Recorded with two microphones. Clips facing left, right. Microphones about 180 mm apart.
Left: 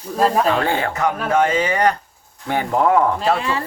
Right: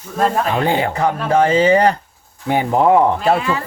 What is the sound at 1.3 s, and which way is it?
Speech, 30° right (ahead or behind).